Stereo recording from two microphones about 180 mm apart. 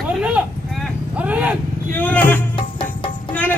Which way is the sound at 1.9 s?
10° left (ahead or behind).